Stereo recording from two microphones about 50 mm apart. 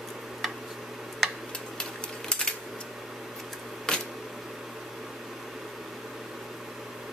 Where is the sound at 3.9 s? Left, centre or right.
Centre.